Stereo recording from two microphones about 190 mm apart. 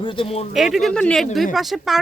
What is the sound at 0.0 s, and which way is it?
Speech, 30° left (ahead or behind).